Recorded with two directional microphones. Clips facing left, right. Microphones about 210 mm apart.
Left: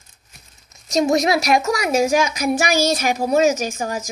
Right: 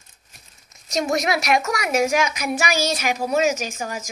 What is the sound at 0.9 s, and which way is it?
A woman's voice, 30° left (ahead or behind).